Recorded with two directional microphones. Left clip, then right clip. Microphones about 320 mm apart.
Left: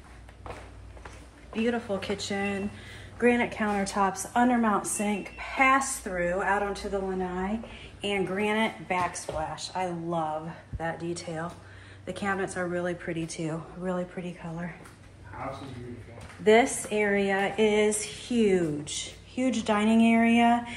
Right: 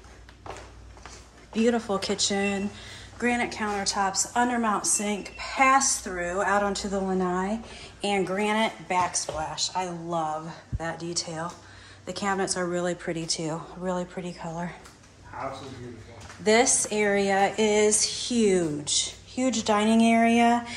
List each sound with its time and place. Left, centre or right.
1.5 s a woman's voice: centre
7.3 s speech: right
8.0 s speech: centre
16.4 s speech: centre